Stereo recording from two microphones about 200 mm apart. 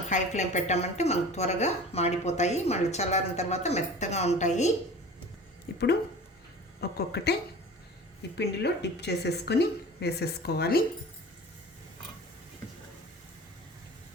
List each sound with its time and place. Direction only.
0.1 s a woman's voice: 35° left (ahead or behind)
5.7 s a woman's voice: 50° left (ahead or behind)
8.4 s a woman's voice: 60° left (ahead or behind)